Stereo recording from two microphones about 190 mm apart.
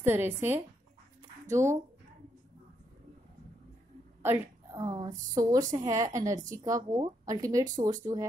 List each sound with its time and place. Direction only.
0.0 s speech: 10° right (ahead or behind)
4.2 s a sound: 15° right (ahead or behind)
5.3 s speech: 15° right (ahead or behind)